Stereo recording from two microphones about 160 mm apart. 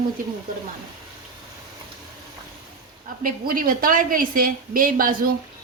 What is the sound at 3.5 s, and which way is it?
A woman's voice, 60° right (ahead or behind).